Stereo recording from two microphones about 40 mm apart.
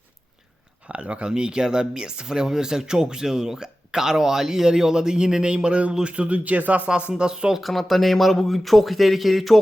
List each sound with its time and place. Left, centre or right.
0.9 s speech: right
1.3 s a man's voice: centre; by 6.8 s right
7.2 s speech: right
7.6 s speech: centre